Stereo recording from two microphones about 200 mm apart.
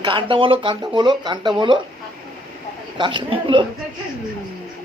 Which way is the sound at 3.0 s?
25° right (ahead or behind).